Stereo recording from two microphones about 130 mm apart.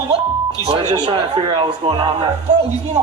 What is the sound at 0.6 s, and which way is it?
Speech, 55° right (ahead or behind).